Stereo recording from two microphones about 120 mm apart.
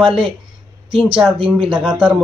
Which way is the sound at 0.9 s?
45° right (ahead or behind).